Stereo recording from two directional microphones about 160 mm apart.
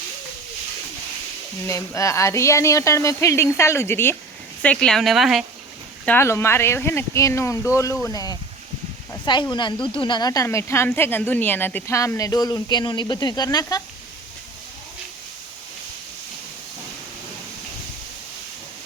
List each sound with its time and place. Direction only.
1.6 s speech: 20° left (ahead or behind); by 5.5 s centre (ahead or behind)
6.1 s speech: 15° left (ahead or behind)